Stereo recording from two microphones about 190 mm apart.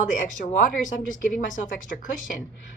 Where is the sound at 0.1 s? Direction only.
40° left (ahead or behind).